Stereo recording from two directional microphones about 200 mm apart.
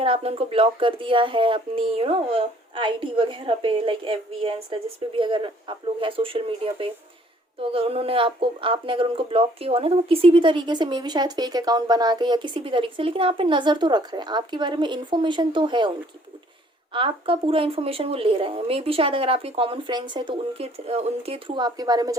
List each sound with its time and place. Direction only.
0.0 s speech: 30° right (ahead or behind)
16.9 s speech: 25° right (ahead or behind)